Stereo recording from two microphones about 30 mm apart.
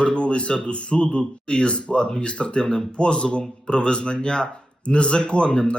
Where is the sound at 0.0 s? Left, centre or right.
Left.